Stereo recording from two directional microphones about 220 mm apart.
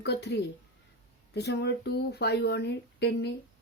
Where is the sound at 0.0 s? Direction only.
50° left (ahead or behind).